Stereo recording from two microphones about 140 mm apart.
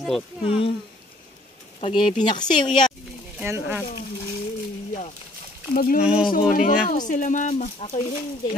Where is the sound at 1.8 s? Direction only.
40° left (ahead or behind).